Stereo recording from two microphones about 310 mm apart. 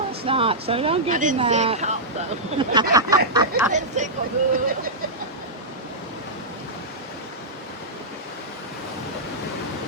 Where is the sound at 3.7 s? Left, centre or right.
Right.